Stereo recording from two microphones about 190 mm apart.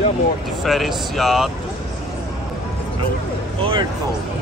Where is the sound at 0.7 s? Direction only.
Centre (ahead or behind).